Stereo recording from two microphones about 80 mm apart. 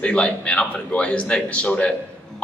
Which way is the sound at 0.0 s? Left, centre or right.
Centre.